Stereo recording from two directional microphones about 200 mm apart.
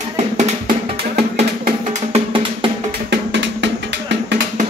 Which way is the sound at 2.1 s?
25° right (ahead or behind).